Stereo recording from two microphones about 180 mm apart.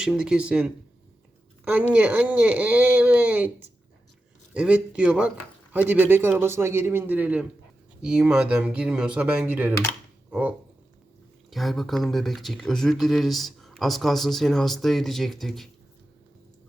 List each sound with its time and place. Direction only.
0.0 s speech: 5° right (ahead or behind)
1.9 s speech: 10° right (ahead or behind)
4.5 s a man's voice: 5° right (ahead or behind)
11.5 s speech: centre (ahead or behind)